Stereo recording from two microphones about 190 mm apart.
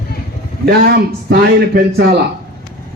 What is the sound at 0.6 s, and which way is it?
A man's voice, 55° right (ahead or behind).